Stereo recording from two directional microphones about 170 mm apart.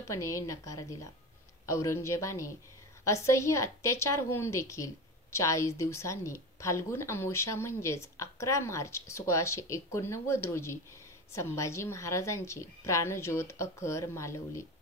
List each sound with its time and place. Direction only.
0.0 s a woman's voice: 20° left (ahead or behind)